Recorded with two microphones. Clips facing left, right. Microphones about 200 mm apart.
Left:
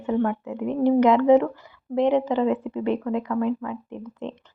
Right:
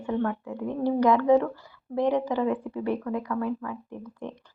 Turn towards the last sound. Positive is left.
turn(degrees=20)  # may be behind; listen again after turning